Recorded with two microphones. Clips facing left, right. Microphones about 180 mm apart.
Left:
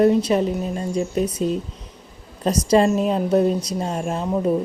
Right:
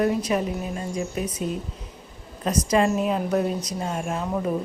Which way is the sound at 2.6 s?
30° left (ahead or behind).